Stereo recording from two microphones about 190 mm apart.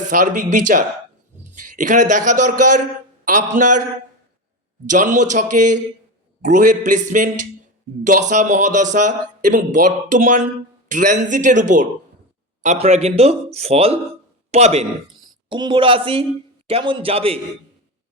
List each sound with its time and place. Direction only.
0.1 s a man's voice: 45° right (ahead or behind)
4.9 s a man's voice: 40° right (ahead or behind)